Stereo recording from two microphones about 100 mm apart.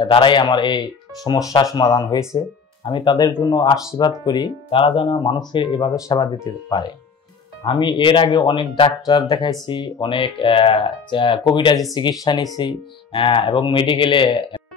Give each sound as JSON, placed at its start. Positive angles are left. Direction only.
{"t": 0.0, "sound": "speech", "side_deg": 55}
{"t": 2.8, "sound": "speech", "side_deg": 55}
{"t": 7.6, "sound": "speech", "side_deg": 50}
{"t": 9.0, "sound": "speech", "side_deg": 45}
{"t": 11.9, "sound": "speech", "side_deg": 40}
{"t": 12.5, "sound": "speech", "side_deg": 55}